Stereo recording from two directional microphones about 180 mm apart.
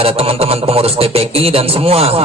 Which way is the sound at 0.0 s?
35° right (ahead or behind).